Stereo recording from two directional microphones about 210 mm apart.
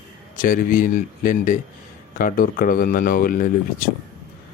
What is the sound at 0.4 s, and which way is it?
Speech, 40° left (ahead or behind).